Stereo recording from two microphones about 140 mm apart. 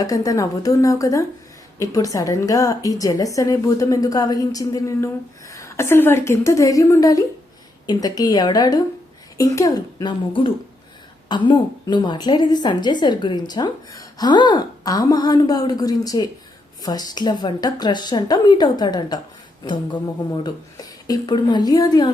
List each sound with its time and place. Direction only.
0.0 s a woman's voice: 25° left (ahead or behind)